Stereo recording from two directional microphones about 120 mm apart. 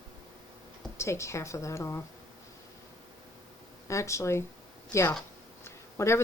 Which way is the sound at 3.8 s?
25° left (ahead or behind).